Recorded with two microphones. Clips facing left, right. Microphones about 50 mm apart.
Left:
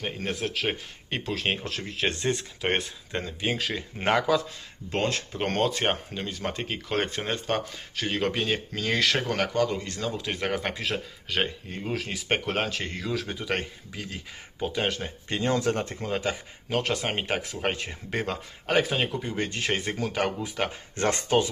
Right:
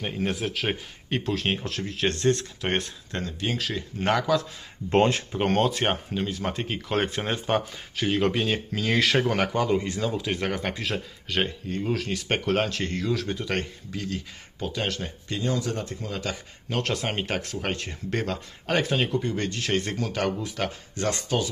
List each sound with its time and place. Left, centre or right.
0.0 s speech: centre
4.9 s speech: right
5.3 s speech: centre
10.0 s speech: centre
15.3 s speech: left
16.6 s speech: centre
19.5 s speech: left
19.8 s speech: centre
20.9 s speech: left